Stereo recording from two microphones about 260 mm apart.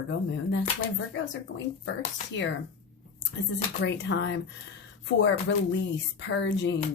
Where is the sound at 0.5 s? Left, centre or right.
Left.